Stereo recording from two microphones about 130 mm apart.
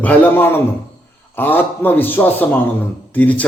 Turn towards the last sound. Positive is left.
turn(degrees=10)  # may be behind; listen again after turning